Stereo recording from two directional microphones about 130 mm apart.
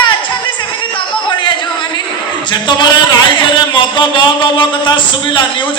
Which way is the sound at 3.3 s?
35° left (ahead or behind).